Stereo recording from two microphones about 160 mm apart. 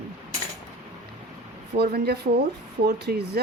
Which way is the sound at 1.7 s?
90° right.